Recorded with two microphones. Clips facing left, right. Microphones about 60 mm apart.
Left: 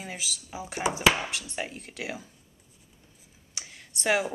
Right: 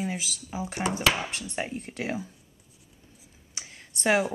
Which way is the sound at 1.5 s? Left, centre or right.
Centre.